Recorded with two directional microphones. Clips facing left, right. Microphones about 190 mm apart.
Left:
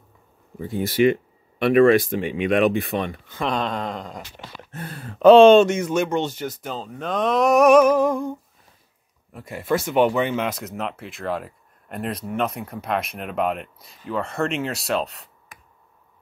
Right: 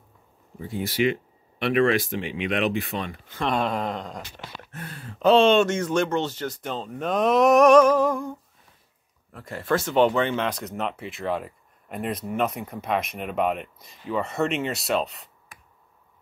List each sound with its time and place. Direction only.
0.7 s speech: 50° left (ahead or behind)
2.9 s speech: 60° left (ahead or behind)
3.3 s speech: 5° right (ahead or behind)
4.4 s speech: 15° left (ahead or behind)
4.7 s speech: 40° left (ahead or behind)
5.2 s speech: 60° left (ahead or behind)
5.7 s speech: 10° left (ahead or behind)
6.6 s speech: centre (ahead or behind)
7.6 s speech: 10° left (ahead or behind)